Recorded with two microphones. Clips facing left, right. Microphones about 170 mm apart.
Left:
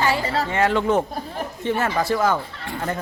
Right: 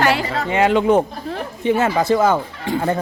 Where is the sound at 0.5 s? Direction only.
15° right (ahead or behind).